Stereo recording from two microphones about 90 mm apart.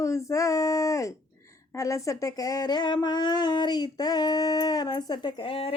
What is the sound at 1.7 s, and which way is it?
Speech, 35° left (ahead or behind).